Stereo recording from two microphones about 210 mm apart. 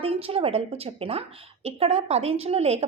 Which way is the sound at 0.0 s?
25° right (ahead or behind).